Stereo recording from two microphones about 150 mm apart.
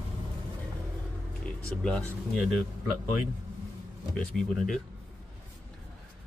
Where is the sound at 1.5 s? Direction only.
5° left (ahead or behind).